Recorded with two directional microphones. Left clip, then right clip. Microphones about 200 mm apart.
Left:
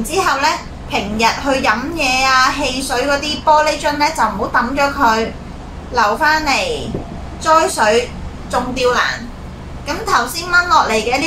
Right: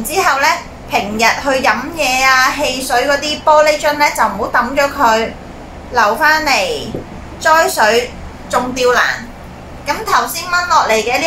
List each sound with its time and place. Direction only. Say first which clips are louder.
0.1 s a child's voice: right 3 dB; 15° right (ahead or behind)
10.0 s a child's voice: even; 15° right (ahead or behind)